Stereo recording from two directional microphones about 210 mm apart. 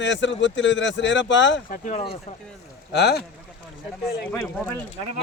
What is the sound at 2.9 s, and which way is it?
Speech, 50° left (ahead or behind).